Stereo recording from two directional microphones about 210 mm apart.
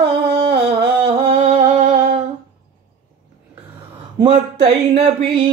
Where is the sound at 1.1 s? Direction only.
30° right (ahead or behind).